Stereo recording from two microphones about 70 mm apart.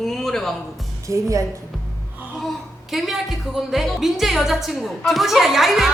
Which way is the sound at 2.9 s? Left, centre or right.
Centre.